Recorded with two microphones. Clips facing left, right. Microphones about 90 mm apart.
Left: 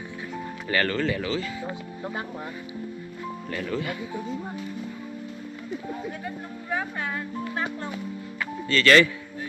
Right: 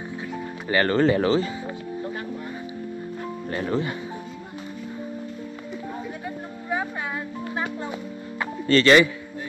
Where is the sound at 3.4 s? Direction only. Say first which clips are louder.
Right 4 dB; 30° right (ahead or behind).